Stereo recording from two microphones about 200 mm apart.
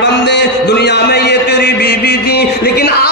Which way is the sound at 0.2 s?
60° left (ahead or behind).